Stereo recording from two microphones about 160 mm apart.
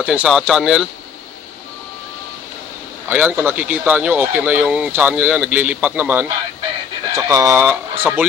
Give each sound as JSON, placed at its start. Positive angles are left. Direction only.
{"t": 0.0, "sound": "speech", "side_deg": -5}
{"t": 3.1, "sound": "speech", "side_deg": -10}